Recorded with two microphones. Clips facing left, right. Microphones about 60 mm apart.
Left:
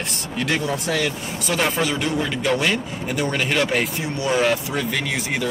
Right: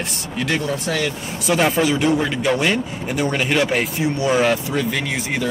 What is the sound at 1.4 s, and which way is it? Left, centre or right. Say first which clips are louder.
Speech: right 4 dB; centre.